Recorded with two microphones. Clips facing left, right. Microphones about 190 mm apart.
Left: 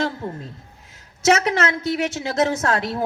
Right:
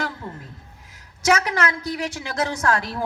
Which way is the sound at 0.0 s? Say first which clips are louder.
Left 5 dB; 30° left (ahead or behind).